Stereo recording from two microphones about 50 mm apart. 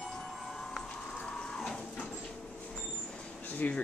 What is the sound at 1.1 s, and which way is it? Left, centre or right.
Printer, centre.